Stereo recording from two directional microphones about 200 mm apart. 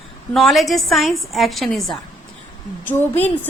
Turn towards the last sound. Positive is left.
turn(degrees=10)  # may be behind; listen again after turning